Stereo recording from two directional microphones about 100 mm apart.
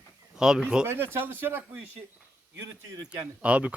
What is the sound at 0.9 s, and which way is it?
Speech, 20° right (ahead or behind).